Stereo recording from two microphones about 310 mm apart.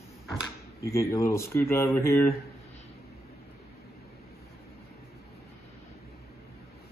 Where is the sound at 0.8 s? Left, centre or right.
Centre.